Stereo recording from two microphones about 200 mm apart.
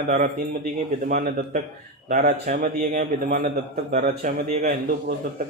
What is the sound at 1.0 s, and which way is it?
A man's voice, 40° right (ahead or behind).